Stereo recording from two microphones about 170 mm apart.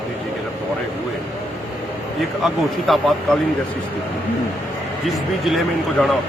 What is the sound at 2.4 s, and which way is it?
Speech, centre (ahead or behind).